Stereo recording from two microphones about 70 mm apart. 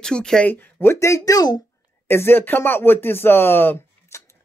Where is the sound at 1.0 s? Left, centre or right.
Left.